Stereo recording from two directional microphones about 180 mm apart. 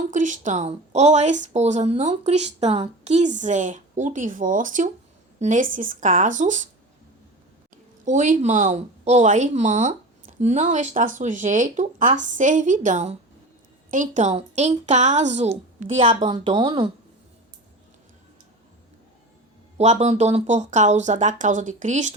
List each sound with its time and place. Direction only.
0.1 s a woman's voice: 45° right (ahead or behind)
8.0 s a woman's voice: 45° right (ahead or behind)
16.0 s a woman's voice: 25° right (ahead or behind)
19.7 s speech: 40° right (ahead or behind)